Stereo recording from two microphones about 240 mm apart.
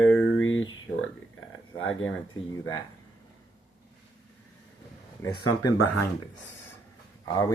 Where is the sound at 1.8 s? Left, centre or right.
Left.